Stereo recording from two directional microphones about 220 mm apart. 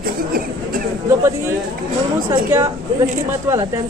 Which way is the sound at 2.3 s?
10° right (ahead or behind).